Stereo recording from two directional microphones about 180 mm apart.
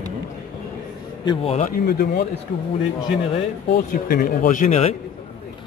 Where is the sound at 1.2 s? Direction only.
30° left (ahead or behind).